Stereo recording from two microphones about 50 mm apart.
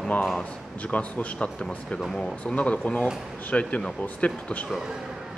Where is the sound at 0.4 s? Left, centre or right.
Left.